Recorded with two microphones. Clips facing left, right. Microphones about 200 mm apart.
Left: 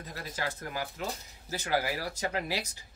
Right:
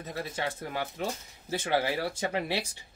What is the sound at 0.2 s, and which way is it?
Speech, 25° right (ahead or behind).